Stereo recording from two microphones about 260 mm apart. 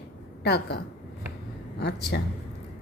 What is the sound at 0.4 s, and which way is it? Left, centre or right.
Speech, left.